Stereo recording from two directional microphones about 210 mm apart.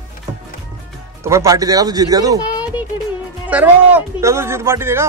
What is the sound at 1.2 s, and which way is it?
A man's voice, 15° right (ahead or behind).